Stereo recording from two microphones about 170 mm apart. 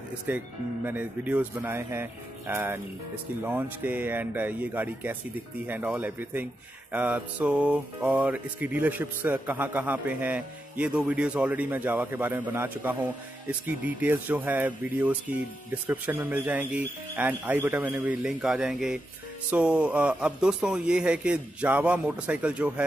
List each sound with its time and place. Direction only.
0.3 s music: 10° right (ahead or behind)